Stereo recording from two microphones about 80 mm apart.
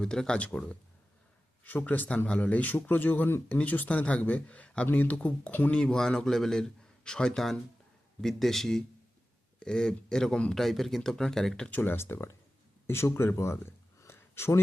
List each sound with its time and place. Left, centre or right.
0.0 s speech: centre
11.7 s speech: left